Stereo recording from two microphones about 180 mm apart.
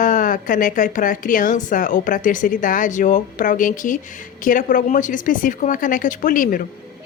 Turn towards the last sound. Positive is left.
turn(degrees=50)  # may be behind; listen again after turning